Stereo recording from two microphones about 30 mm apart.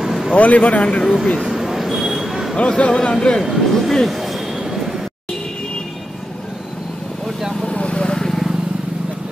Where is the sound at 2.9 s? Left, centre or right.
Centre.